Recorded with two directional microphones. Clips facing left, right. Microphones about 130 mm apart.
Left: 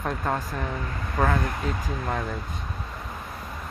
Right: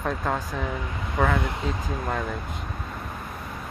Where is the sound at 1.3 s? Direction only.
20° right (ahead or behind).